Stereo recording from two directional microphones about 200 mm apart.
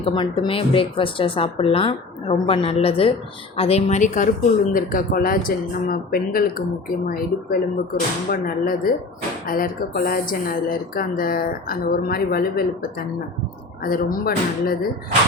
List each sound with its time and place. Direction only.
0.0 s a woman's voice: 25° left (ahead or behind); by 12.6 s 50° left (ahead or behind)
13.8 s speech: 45° left (ahead or behind)